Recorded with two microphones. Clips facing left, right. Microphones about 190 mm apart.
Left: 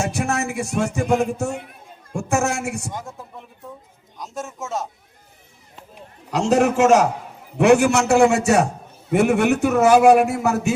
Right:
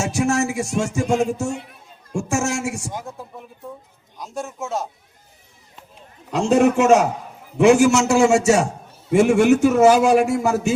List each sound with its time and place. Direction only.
0.0 s music: 55° left (ahead or behind)
2.9 s a man's voice: centre (ahead or behind)
4.2 s a man's voice: centre (ahead or behind)
6.3 s a man's voice: 70° left (ahead or behind)
7.6 s music: 60° left (ahead or behind)